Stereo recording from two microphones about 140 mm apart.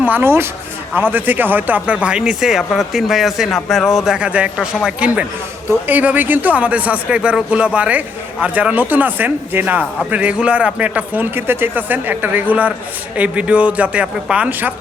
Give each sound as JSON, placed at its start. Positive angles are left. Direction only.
{"t": 0.0, "sound": "speech", "side_deg": -15}